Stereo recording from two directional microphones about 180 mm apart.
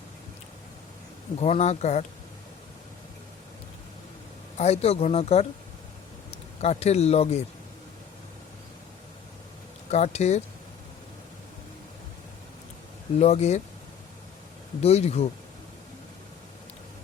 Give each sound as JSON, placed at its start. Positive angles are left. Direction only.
{"t": 1.4, "sound": "speech", "side_deg": 35}
{"t": 4.5, "sound": "speech", "side_deg": 35}
{"t": 9.9, "sound": "speech", "side_deg": 40}
{"t": 13.1, "sound": "speech", "side_deg": 35}
{"t": 14.8, "sound": "speech", "side_deg": 35}